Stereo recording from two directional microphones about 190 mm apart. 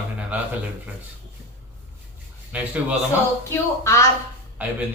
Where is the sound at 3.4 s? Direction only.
15° left (ahead or behind).